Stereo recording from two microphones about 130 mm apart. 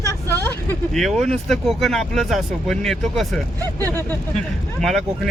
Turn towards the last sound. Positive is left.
turn(degrees=0)  # may be behind; listen again after turning